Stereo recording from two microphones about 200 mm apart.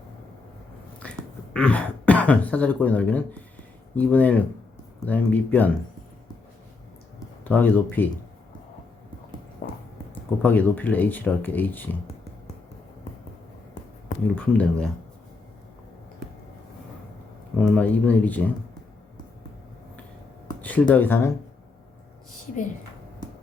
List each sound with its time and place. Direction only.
1.5 s speech: 5° left (ahead or behind)
7.4 s speech: 10° left (ahead or behind)
9.6 s a sound: 45° left (ahead or behind)
10.4 s speech: 10° left (ahead or behind)
14.3 s speech: 5° left (ahead or behind)
17.6 s speech: 5° left (ahead or behind)
20.6 s speech: 10° left (ahead or behind)